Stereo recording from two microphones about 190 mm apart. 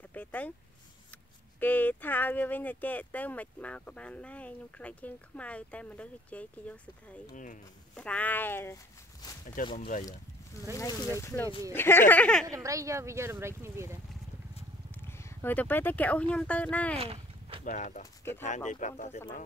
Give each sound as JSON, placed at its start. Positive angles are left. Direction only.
{"t": 0.1, "sound": "speech", "side_deg": 10}
{"t": 1.6, "sound": "speech", "side_deg": 10}
{"t": 7.3, "sound": "speech", "side_deg": 40}
{"t": 7.9, "sound": "speech", "side_deg": 5}
{"t": 9.6, "sound": "speech", "side_deg": 45}
{"t": 10.8, "sound": "speech", "side_deg": 15}
{"t": 12.4, "sound": "speech", "side_deg": -15}
{"t": 15.0, "sound": "speech", "side_deg": 15}
{"t": 17.0, "sound": "a sound", "side_deg": -30}
{"t": 17.6, "sound": "speech", "side_deg": 40}